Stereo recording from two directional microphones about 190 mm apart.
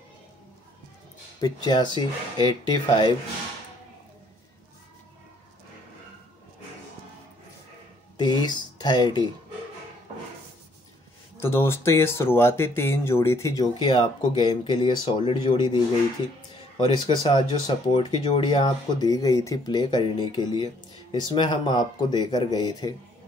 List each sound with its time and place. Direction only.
1.4 s speech: 20° left (ahead or behind)
8.2 s speech: 25° left (ahead or behind)
11.3 s speech: 15° left (ahead or behind)
16.8 s speech: 25° left (ahead or behind)